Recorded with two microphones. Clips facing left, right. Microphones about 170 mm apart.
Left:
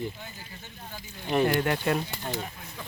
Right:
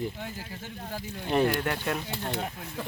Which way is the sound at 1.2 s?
Centre (ahead or behind).